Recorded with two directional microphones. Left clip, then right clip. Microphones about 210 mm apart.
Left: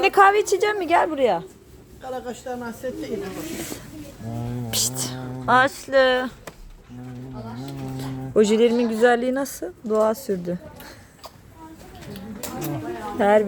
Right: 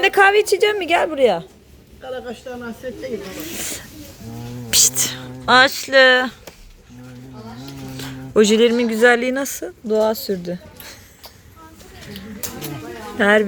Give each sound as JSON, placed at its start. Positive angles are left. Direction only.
{"t": 0.0, "sound": "speech", "side_deg": -5}
{"t": 2.0, "sound": "a woman's voice", "side_deg": 20}
{"t": 3.2, "sound": "speech", "side_deg": 0}
{"t": 4.7, "sound": "speech", "side_deg": -10}
{"t": 7.9, "sound": "speech", "side_deg": -5}
{"t": 13.1, "sound": "speech", "side_deg": -5}